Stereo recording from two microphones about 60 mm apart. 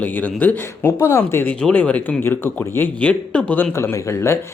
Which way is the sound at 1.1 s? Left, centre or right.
Left.